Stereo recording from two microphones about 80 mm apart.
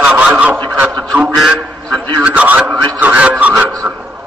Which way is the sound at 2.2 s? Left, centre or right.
Centre.